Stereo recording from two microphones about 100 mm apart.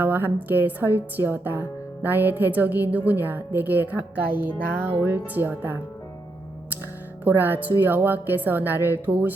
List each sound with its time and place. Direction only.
0.0 s a woman's voice: 20° right (ahead or behind)
0.4 s music: 20° right (ahead or behind)
7.3 s music: 20° right (ahead or behind)